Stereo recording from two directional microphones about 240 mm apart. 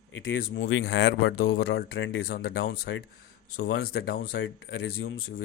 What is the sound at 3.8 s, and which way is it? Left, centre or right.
Speech, left.